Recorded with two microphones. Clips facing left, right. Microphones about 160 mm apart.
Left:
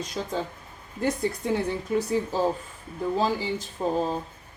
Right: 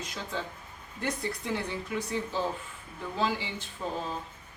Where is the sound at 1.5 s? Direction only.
40° left (ahead or behind).